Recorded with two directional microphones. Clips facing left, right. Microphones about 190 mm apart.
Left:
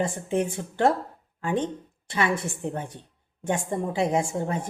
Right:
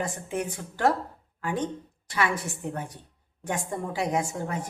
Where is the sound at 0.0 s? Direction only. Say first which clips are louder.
Left 5 dB; 25° left (ahead or behind).